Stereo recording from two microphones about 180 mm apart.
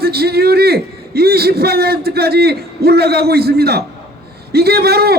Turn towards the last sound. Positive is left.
turn(degrees=-60)  # may be behind; listen again after turning